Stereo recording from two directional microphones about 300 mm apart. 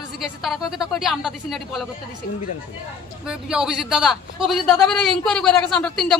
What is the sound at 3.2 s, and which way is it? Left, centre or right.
A woman's voice, centre.